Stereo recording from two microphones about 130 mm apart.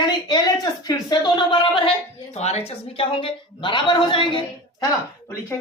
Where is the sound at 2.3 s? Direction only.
55° left (ahead or behind).